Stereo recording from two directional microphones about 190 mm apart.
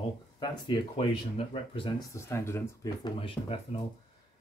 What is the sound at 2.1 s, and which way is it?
Speech, 15° left (ahead or behind).